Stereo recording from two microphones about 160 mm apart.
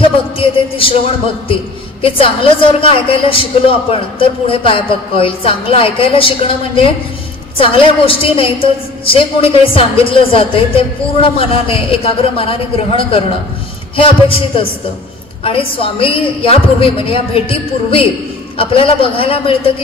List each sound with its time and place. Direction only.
0.4 s music: 35° left (ahead or behind)
1.5 s a woman's voice: 35° left (ahead or behind)